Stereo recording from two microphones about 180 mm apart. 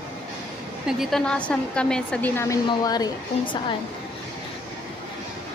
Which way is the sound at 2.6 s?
20° left (ahead or behind).